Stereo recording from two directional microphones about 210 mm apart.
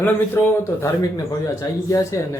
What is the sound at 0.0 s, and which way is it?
A man's voice, 10° left (ahead or behind).